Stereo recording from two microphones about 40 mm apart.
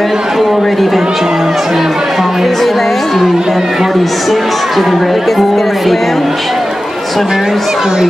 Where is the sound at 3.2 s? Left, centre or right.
Centre.